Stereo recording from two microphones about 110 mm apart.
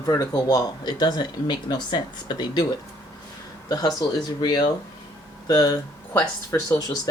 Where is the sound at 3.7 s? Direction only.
40° left (ahead or behind).